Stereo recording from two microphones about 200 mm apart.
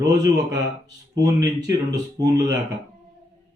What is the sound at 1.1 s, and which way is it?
Speech, 20° right (ahead or behind).